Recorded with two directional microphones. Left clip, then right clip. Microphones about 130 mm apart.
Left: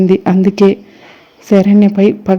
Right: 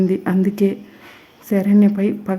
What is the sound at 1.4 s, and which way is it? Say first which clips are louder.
Speech: left 7 dB; 30° left (ahead or behind).